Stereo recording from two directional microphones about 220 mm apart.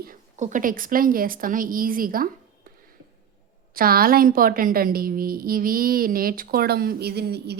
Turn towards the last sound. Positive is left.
turn(degrees=-45)  # may be behind; listen again after turning